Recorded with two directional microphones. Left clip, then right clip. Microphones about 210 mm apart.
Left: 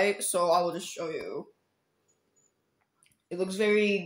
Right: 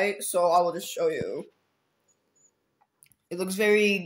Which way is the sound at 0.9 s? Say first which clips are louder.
Right 8 dB; 45° right (ahead or behind).